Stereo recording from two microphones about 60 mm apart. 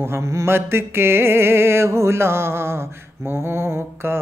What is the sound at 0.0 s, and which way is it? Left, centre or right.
Music, right.